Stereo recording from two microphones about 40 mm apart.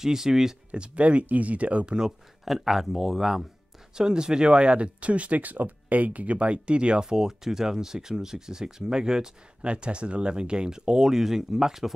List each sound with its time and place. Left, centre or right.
0.0 s speech: centre
0.7 s speech: right
2.4 s speech: centre
3.9 s speech: centre
9.6 s speech: right; by 11.9 s centre